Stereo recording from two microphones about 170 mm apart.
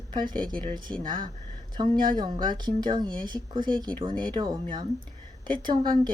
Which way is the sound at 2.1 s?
25° right (ahead or behind).